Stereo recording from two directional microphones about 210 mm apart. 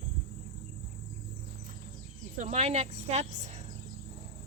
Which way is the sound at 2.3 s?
30° right (ahead or behind).